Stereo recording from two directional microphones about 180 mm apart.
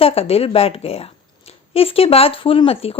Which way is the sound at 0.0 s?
35° left (ahead or behind).